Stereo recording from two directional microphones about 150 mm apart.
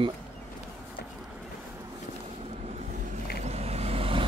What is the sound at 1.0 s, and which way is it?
Vehicle, 90° left.